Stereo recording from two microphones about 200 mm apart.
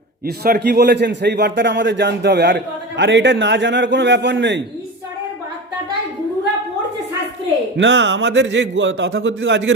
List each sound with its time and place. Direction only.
0.3 s a man's voice: 50° right (ahead or behind)
7.8 s a man's voice: 65° right (ahead or behind)